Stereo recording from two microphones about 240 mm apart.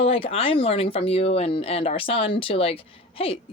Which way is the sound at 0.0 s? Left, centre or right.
Left.